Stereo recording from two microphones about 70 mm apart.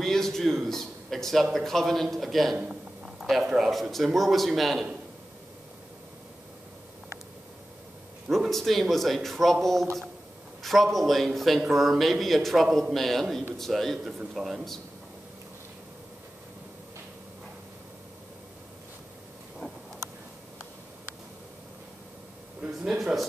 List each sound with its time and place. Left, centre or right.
0.0 s a sound: centre
0.7 s a man's voice: centre
2.5 s a man's voice: centre
3.2 s a sound: centre
3.4 s a man's voice: centre
8.5 s a man's voice: centre
22.8 s a man's voice: centre